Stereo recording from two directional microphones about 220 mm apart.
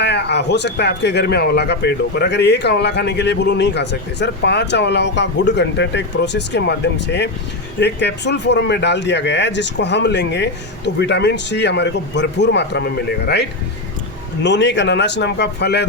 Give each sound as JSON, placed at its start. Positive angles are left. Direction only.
{"t": 0.0, "sound": "speech", "side_deg": 50}